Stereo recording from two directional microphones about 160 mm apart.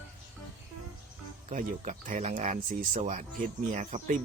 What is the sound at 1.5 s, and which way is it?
Speech, 50° right (ahead or behind).